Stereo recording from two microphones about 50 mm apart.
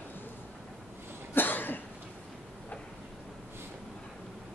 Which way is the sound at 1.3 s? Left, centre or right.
Left.